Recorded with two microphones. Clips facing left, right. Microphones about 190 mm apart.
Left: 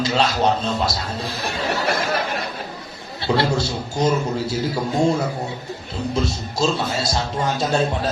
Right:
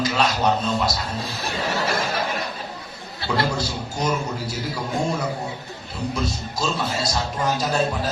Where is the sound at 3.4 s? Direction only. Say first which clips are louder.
Left 2 dB; 25° left (ahead or behind).